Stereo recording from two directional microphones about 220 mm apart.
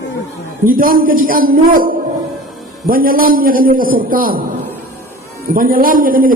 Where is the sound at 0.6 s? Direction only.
40° right (ahead or behind).